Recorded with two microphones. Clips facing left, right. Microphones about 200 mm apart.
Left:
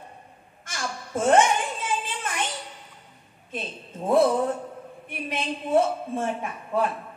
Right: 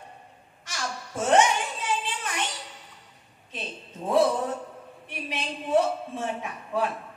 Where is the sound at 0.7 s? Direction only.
50° left (ahead or behind).